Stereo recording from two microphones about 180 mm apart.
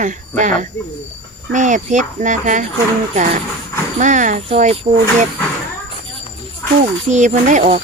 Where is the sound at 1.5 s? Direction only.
45° right (ahead or behind).